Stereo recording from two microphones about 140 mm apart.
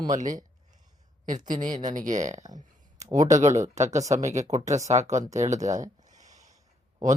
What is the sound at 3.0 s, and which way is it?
Speech, 25° right (ahead or behind).